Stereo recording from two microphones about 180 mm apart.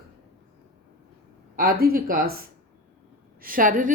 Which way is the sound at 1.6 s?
55° right (ahead or behind).